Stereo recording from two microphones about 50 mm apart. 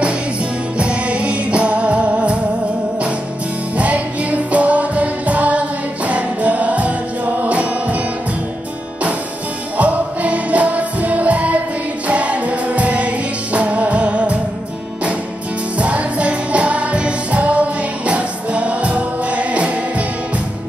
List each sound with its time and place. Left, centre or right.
0.7 s music: right
3.7 s music: right
9.8 s music: right
15.8 s music: right